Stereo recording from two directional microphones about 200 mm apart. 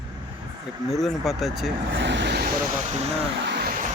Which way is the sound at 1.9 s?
60° right (ahead or behind).